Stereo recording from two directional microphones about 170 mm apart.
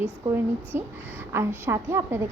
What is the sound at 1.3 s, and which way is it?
Speech, 15° right (ahead or behind).